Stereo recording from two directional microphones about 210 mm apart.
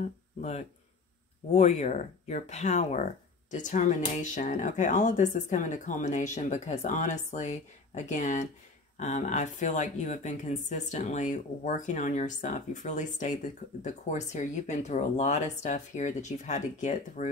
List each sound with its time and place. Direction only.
0.0 s speech: 35° left (ahead or behind)